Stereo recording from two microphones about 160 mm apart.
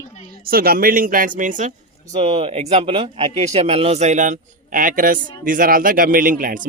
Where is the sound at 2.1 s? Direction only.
40° right (ahead or behind).